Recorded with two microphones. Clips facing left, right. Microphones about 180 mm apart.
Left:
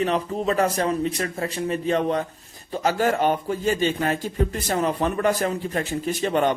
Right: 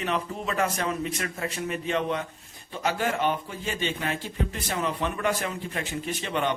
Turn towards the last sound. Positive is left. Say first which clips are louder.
# left 6 dB
turn(degrees=45)  # may be behind; listen again after turning